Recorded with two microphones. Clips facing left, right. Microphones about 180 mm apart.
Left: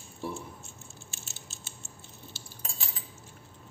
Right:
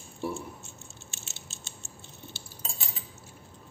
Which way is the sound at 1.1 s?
25° right (ahead or behind).